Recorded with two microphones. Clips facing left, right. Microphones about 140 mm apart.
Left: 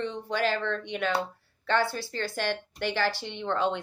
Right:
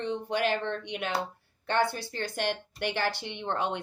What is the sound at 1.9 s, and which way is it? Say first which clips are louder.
Speech: left 1 dB; 20° right (ahead or behind).